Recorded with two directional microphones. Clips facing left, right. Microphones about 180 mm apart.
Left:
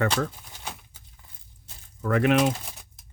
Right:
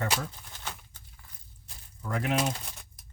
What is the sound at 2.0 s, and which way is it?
Speech, 75° left (ahead or behind).